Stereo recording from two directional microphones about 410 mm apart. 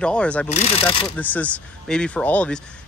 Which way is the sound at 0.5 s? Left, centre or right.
Centre.